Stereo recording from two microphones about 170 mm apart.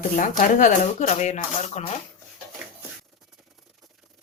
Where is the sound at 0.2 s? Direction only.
50° left (ahead or behind).